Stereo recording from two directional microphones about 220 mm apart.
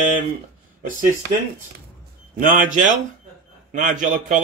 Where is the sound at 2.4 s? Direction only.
35° right (ahead or behind).